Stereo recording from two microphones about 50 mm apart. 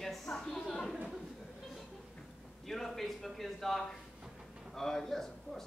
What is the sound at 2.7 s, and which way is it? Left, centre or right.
A man's voice, centre.